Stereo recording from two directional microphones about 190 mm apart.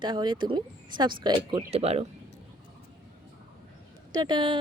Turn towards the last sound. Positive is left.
turn(degrees=-25)  # may be behind; listen again after turning